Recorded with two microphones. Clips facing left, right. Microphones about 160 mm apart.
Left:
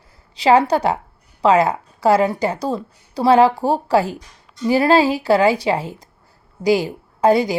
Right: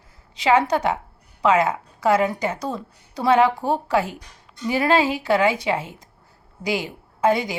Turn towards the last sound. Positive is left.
turn(degrees=35)  # may be behind; listen again after turning